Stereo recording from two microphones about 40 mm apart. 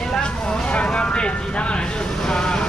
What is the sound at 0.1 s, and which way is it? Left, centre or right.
Vehicle, left.